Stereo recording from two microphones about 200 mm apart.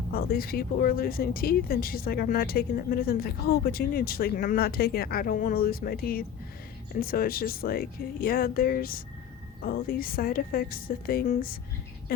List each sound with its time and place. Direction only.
0.1 s speech: 50° left (ahead or behind)